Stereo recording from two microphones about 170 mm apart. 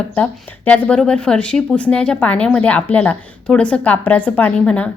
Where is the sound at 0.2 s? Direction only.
10° left (ahead or behind).